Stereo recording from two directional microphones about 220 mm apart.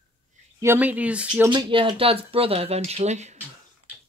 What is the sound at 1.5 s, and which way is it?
Speech, 20° right (ahead or behind).